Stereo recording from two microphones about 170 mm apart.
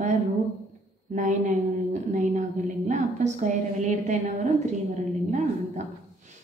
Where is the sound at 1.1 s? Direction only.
50° right (ahead or behind).